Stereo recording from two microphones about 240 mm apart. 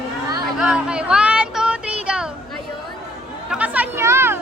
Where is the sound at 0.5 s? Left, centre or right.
Centre.